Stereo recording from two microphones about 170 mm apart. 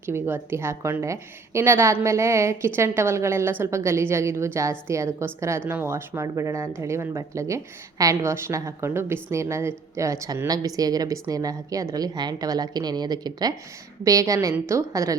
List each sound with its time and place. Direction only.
0.0 s a woman's voice: 15° right (ahead or behind)